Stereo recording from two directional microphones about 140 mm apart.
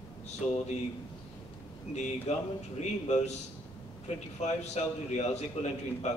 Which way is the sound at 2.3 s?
55° left (ahead or behind).